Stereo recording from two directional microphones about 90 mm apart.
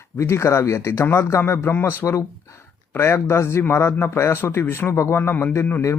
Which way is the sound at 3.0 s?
30° left (ahead or behind).